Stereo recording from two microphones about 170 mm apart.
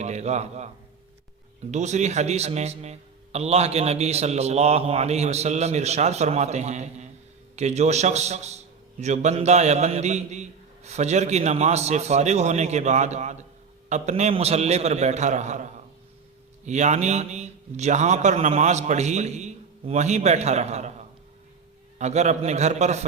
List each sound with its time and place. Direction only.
0.0 s a man's voice: 40° right (ahead or behind)
1.7 s a man's voice: 40° right (ahead or behind)
16.6 s a man's voice: 45° right (ahead or behind)
21.9 s a man's voice: 40° right (ahead or behind)